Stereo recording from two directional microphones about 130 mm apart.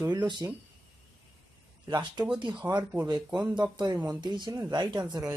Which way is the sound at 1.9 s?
35° right (ahead or behind).